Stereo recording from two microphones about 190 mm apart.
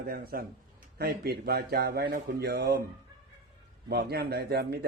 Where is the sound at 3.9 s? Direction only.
60° right (ahead or behind).